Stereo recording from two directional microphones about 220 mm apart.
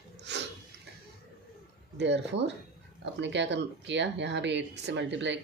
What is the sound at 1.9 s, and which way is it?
Speech, 50° right (ahead or behind).